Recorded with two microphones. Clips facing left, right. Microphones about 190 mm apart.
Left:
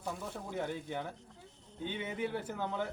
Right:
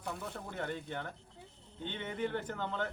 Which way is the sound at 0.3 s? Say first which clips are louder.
Left 2 dB; 10° left (ahead or behind).